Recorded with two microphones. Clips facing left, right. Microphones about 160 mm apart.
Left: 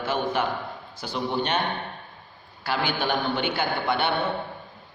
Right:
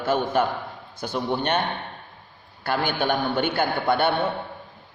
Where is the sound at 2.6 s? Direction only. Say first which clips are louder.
Right 2 dB; 50° right (ahead or behind).